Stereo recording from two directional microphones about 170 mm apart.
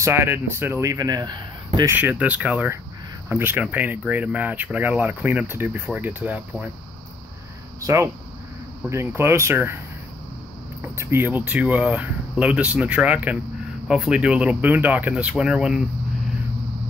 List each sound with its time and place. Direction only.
0.0 s speech: 15° right (ahead or behind)
2.0 s speech: 10° right (ahead or behind)
7.8 s speech: 15° right (ahead or behind)
10.8 s speech: 15° right (ahead or behind)